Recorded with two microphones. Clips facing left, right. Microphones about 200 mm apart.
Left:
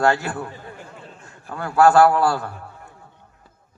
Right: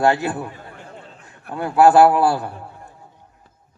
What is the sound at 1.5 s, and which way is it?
Speech, 20° right (ahead or behind).